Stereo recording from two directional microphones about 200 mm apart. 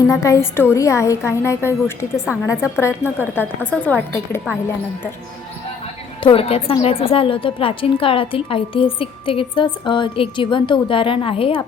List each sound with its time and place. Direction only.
0.1 s a woman's voice: 15° left (ahead or behind)
2.3 s a woman's voice: 5° right (ahead or behind)
2.7 s a woman's voice: 10° left (ahead or behind)
6.2 s a woman's voice: 30° left (ahead or behind)